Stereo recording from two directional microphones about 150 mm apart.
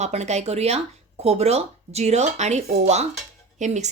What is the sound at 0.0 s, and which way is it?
Speech, 50° right (ahead or behind).